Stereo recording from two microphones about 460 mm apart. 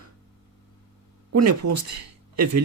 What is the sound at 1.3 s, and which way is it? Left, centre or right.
Speech, right.